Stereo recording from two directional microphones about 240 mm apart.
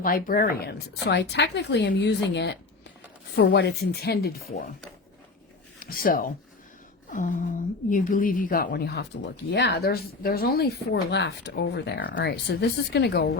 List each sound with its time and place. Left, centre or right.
0.0 s a woman's voice: left
5.8 s a woman's voice: left